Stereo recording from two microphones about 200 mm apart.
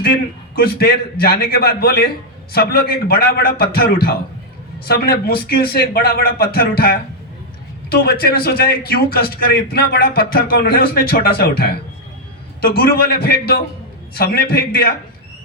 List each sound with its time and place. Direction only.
0.0 s a man's voice: 50° left (ahead or behind)